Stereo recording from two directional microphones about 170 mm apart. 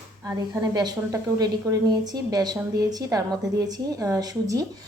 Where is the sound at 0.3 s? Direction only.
25° right (ahead or behind).